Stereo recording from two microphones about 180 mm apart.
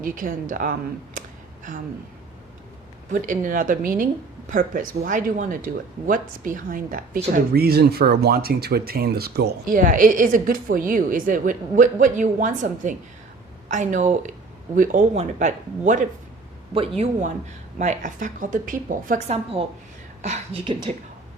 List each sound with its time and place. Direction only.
0.0 s speech: 50° right (ahead or behind)
3.1 s speech: 45° right (ahead or behind)
20.2 s speech: 35° right (ahead or behind)